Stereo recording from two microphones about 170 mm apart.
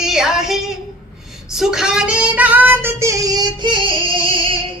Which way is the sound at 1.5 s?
5° right (ahead or behind).